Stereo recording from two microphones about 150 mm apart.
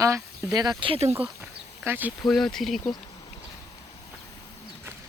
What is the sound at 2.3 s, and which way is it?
Speech, 5° left (ahead or behind).